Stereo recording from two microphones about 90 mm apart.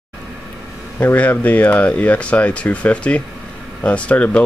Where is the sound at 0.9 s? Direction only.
20° left (ahead or behind).